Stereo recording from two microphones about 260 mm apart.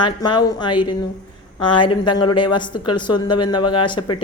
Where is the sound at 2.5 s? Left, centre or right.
Centre.